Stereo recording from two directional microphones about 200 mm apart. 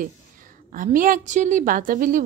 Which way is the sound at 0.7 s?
40° right (ahead or behind).